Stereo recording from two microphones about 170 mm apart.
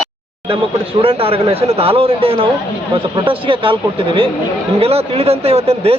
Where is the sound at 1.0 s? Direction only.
35° right (ahead or behind).